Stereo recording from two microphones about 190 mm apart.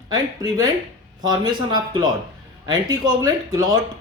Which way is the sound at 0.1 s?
20° right (ahead or behind).